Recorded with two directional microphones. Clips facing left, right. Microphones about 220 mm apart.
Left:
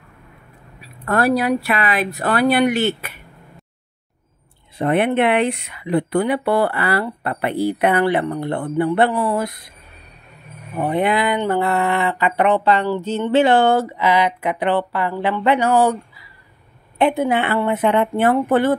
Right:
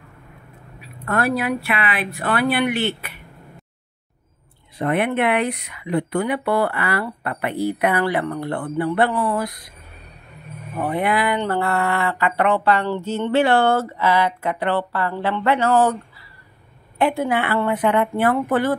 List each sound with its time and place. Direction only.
0.7 s speech: 35° left (ahead or behind)
4.7 s speech: 30° left (ahead or behind)
10.8 s speech: 25° left (ahead or behind)